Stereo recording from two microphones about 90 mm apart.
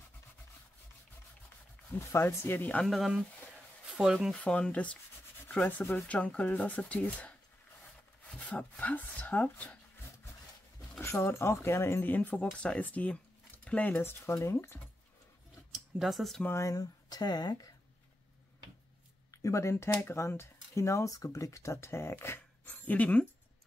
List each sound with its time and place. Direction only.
2.0 s speech: 30° left (ahead or behind)
2.8 s speech: centre (ahead or behind)
4.4 s speech: 15° left (ahead or behind)
11.0 s speech: 30° left (ahead or behind)
15.7 s speech: centre (ahead or behind)
16.4 s speech: 35° left (ahead or behind); by 17.6 s 50° left (ahead or behind)
19.3 s speech: 35° left (ahead or behind); by 23.2 s 15° left (ahead or behind)